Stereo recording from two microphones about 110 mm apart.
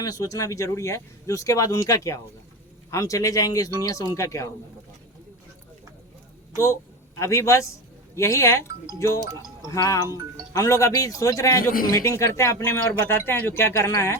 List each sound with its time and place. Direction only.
0.0 s a man's voice: 35° left (ahead or behind)
7.2 s a man's voice: 25° left (ahead or behind)